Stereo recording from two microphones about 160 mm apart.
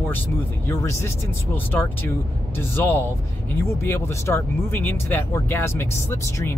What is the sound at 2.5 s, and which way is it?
Speech, 15° left (ahead or behind).